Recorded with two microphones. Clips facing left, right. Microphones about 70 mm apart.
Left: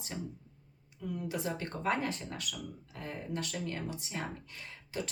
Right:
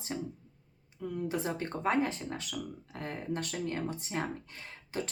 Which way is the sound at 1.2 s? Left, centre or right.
Right.